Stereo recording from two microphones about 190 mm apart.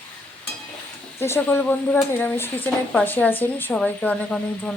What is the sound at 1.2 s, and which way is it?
Speech, 10° left (ahead or behind).